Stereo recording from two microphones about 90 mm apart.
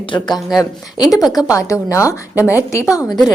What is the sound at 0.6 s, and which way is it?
A woman's voice, 40° left (ahead or behind).